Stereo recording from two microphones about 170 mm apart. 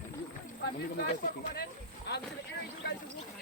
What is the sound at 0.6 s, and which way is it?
Speech, 65° left (ahead or behind).